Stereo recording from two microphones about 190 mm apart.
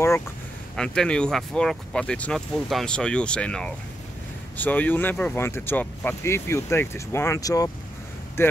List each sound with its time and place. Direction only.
0.7 s speech: 5° left (ahead or behind)